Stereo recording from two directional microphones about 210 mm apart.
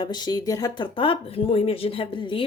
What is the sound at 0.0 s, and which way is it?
Speech, 20° left (ahead or behind).